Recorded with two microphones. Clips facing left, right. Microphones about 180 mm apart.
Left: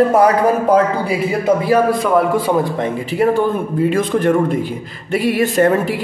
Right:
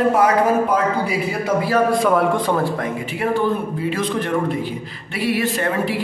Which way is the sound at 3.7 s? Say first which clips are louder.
Left 6 dB; 50° left (ahead or behind).